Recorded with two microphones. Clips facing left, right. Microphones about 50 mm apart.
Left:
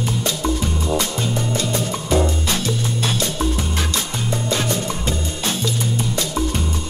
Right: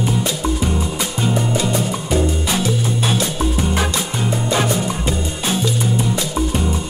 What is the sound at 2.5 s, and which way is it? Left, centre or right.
Music, centre.